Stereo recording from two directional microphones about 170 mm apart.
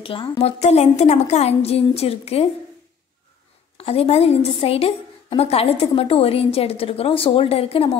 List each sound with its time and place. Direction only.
0.0 s a woman's voice: 30° left (ahead or behind)
3.7 s a woman's voice: 35° left (ahead or behind)